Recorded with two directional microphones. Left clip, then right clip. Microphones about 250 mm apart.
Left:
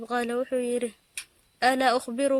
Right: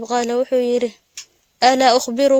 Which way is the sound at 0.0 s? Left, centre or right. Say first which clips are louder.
Right 9 dB; right.